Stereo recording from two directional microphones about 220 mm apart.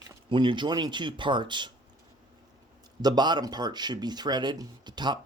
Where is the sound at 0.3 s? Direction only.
20° right (ahead or behind).